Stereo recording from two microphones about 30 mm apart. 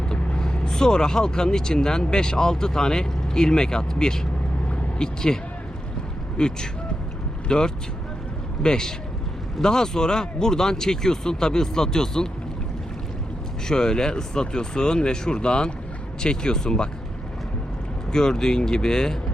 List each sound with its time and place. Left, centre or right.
0.1 s speech: left
13.7 s speech: left
18.1 s speech: left